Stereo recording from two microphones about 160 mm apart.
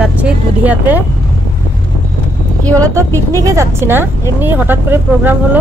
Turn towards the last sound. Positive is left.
turn(degrees=-15)  # may be behind; listen again after turning